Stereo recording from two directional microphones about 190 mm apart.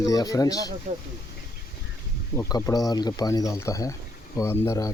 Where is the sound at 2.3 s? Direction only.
20° left (ahead or behind).